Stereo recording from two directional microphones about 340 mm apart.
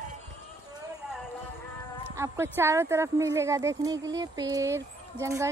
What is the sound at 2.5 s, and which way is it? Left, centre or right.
Speech, centre.